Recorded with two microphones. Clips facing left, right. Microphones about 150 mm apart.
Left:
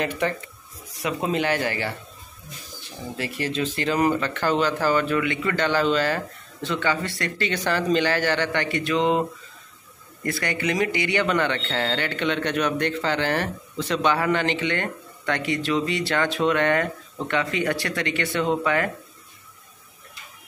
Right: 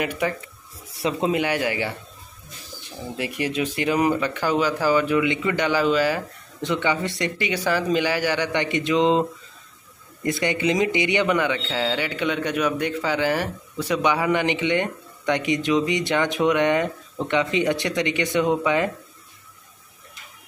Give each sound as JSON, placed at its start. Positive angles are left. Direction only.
{"t": 0.0, "sound": "a man's voice", "side_deg": -10}
{"t": 0.9, "sound": "speech", "side_deg": -30}
{"t": 1.3, "sound": "a man's voice", "side_deg": -10}
{"t": 3.2, "sound": "a man's voice", "side_deg": -15}
{"t": 10.4, "sound": "a man's voice", "side_deg": -20}